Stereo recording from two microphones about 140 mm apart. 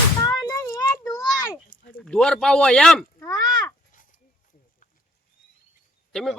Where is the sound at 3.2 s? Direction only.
30° left (ahead or behind).